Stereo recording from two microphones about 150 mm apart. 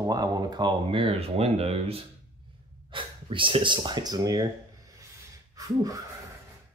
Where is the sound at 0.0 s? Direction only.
25° right (ahead or behind).